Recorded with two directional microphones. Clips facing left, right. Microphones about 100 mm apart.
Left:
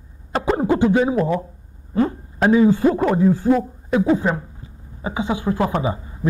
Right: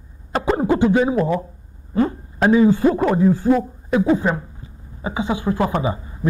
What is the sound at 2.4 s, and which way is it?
Speech, 25° right (ahead or behind).